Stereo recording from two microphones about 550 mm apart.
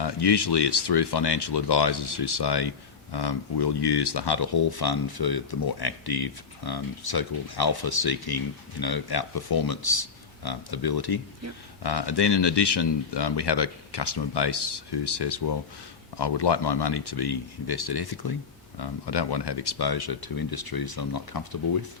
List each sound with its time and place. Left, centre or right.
0.0 s speech: left